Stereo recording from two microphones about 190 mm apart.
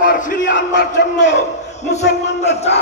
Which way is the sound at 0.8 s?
65° left (ahead or behind).